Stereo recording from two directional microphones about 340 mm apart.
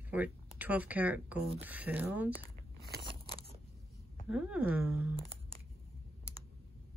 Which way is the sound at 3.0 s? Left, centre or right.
Centre.